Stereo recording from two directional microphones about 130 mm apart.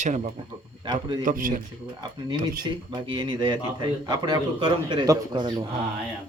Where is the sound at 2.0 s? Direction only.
35° right (ahead or behind).